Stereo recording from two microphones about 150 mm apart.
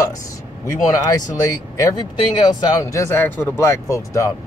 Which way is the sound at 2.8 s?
20° left (ahead or behind).